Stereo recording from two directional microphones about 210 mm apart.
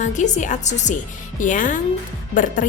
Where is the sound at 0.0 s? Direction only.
35° left (ahead or behind).